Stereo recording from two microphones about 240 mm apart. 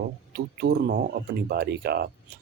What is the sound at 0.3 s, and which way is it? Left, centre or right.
Speech, right.